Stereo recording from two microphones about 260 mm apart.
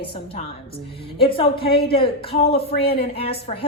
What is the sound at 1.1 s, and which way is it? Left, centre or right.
A woman's voice, left.